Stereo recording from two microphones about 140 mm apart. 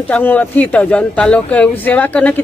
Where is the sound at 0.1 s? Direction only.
10° left (ahead or behind).